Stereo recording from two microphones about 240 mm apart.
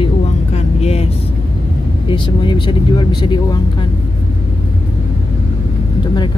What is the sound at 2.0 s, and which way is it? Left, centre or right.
Speech, centre.